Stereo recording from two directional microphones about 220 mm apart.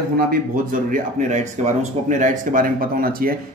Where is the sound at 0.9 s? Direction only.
35° right (ahead or behind).